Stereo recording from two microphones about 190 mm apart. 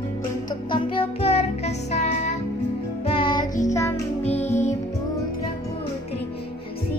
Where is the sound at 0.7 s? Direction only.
30° left (ahead or behind).